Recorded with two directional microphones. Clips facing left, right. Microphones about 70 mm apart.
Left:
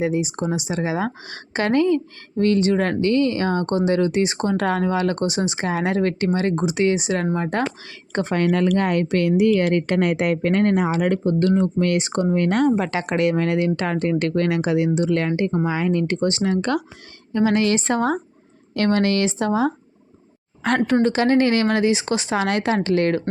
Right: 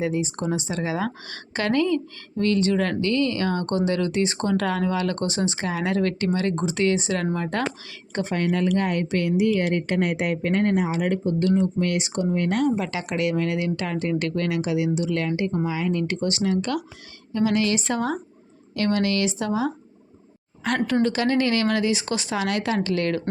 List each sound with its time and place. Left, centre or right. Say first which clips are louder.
0.0 s speech: left 3 dB; centre
6.7 s speech: left 3 dB; centre
7.9 s speech: left 4 dB; left
8.4 s a woman's voice: left 3 dB; left